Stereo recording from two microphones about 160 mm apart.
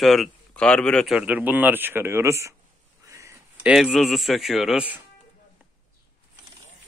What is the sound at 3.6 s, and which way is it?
Speech, 5° right (ahead or behind).